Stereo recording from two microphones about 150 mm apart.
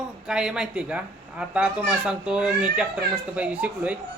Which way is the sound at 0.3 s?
5° right (ahead or behind).